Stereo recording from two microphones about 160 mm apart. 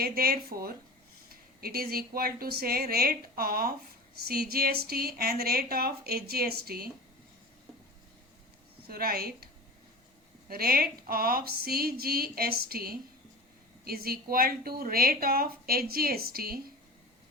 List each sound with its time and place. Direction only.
0.0 s a woman's voice: 70° right (ahead or behind)
8.9 s a woman's voice: 70° right (ahead or behind)
10.5 s a woman's voice: 70° right (ahead or behind)